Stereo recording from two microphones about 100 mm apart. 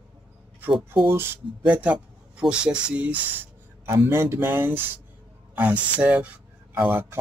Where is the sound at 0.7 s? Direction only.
Centre (ahead or behind).